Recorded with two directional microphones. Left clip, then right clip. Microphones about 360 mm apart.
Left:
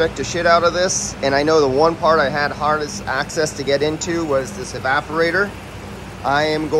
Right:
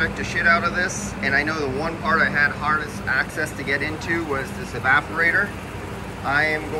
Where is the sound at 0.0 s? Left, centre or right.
Centre.